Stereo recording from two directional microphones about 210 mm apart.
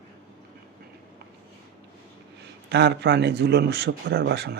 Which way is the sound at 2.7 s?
55° right (ahead or behind).